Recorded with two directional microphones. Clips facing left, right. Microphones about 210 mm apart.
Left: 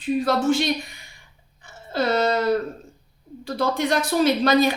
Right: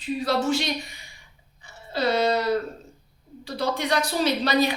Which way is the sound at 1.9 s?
50° left (ahead or behind).